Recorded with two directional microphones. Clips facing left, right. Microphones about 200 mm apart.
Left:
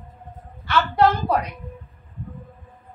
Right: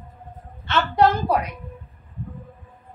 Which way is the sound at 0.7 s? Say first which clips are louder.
Even; 20° right (ahead or behind).